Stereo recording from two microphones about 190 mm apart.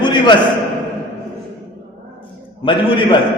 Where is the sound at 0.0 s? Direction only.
25° left (ahead or behind).